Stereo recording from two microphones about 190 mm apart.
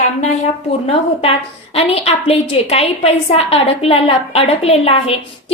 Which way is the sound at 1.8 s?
30° left (ahead or behind).